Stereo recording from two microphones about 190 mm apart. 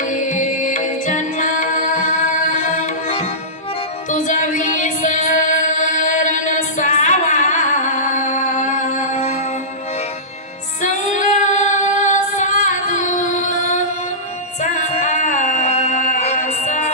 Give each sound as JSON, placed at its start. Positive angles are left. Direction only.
{"t": 0.0, "sound": "music", "side_deg": 40}
{"t": 10.8, "sound": "female singing", "side_deg": 40}
{"t": 14.6, "sound": "music", "side_deg": 40}